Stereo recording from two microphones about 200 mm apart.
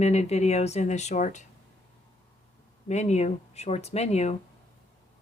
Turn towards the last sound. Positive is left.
turn(degrees=30)  # may be behind; listen again after turning